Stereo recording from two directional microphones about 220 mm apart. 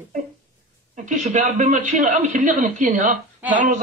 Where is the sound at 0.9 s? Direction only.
35° right (ahead or behind).